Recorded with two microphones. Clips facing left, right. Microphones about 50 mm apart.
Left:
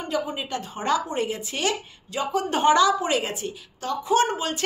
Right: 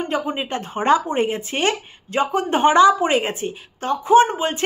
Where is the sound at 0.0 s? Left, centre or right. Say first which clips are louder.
Right 4 dB; right.